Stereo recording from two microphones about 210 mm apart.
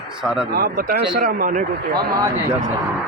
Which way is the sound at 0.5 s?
45° right (ahead or behind).